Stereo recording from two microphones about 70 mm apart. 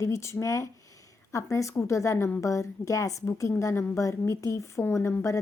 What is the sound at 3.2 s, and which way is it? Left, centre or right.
A woman's voice, left.